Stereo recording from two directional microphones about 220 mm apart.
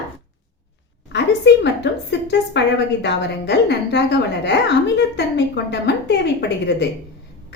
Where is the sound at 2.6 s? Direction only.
50° left (ahead or behind).